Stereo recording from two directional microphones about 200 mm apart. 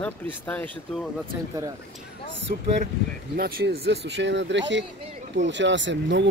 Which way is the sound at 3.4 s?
50° right (ahead or behind).